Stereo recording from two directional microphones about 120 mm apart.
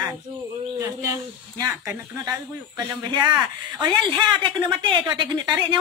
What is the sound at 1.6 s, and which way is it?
Speech, 30° right (ahead or behind).